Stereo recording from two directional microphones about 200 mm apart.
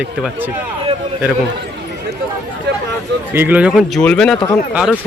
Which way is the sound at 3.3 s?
10° right (ahead or behind).